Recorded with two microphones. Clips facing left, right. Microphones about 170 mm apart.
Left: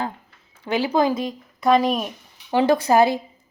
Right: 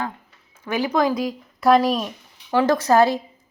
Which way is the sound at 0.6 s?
30° left (ahead or behind).